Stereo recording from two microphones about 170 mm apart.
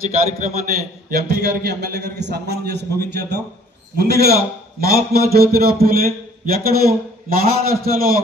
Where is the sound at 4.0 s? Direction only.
70° right (ahead or behind).